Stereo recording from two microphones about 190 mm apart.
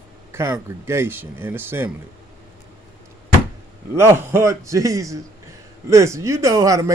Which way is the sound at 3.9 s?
15° right (ahead or behind).